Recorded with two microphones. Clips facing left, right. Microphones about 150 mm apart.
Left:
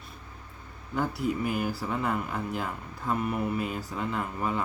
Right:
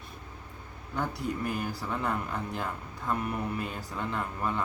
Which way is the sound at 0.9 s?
5° left (ahead or behind).